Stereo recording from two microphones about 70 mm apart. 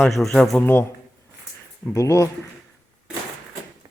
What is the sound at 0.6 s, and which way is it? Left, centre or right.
Speech, left.